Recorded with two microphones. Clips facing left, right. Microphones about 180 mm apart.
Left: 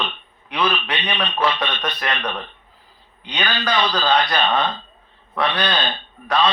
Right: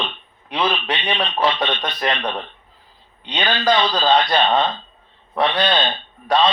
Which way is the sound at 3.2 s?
30° right (ahead or behind).